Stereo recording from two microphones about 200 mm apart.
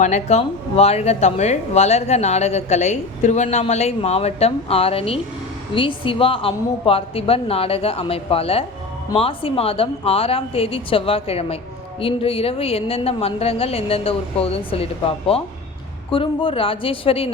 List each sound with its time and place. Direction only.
0.0 s a woman's voice: 35° left (ahead or behind)